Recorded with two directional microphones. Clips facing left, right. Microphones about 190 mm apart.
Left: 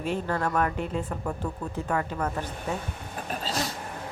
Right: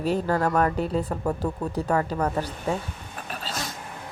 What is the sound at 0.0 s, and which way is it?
Speech, 40° right (ahead or behind).